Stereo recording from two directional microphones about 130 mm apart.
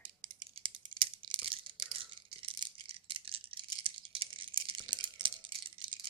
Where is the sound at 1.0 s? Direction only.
40° right (ahead or behind).